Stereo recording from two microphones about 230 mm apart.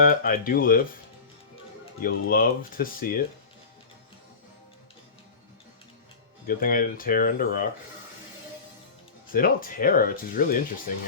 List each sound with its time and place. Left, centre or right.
0.0 s speech: left
2.0 s speech: left
6.6 s speech: left
9.3 s speech: left